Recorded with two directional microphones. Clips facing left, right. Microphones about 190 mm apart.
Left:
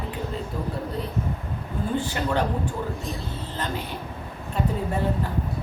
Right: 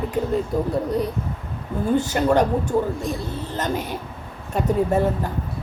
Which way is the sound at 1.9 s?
45° right (ahead or behind).